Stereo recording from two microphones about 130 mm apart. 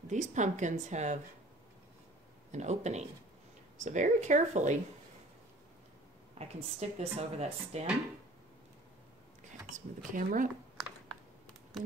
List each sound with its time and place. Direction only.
0.1 s a woman's voice: 70° right (ahead or behind)
2.5 s a woman's voice: 65° right (ahead or behind)
6.3 s speech: 55° right (ahead or behind)
9.8 s speech: 90° right